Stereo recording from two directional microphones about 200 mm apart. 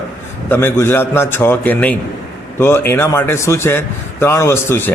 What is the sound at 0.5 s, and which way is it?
Speech, 10° left (ahead or behind).